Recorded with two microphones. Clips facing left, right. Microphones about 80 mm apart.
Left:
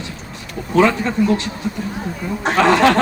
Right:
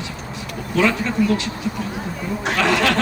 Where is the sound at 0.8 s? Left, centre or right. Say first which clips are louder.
Left 4 dB; left.